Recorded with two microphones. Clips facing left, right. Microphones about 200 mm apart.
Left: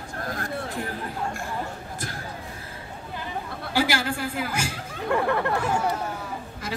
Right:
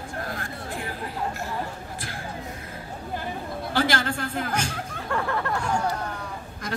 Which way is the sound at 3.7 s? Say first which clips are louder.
Even; 10° left (ahead or behind).